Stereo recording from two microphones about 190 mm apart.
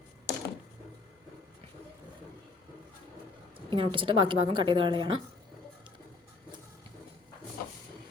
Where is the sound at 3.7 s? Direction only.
25° right (ahead or behind).